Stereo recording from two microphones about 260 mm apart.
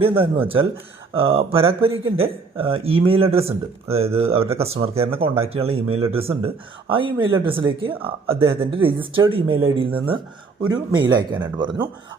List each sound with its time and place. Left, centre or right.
0.0 s a man's voice: right